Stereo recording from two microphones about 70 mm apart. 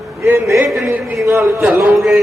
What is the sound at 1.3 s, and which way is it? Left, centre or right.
Speech, right.